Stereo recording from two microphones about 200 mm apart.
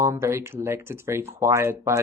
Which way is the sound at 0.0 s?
15° right (ahead or behind).